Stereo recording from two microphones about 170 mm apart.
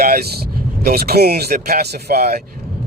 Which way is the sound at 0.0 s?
60° right (ahead or behind).